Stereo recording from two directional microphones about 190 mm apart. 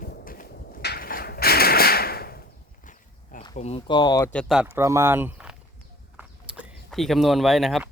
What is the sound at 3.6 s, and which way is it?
Speech, 35° left (ahead or behind).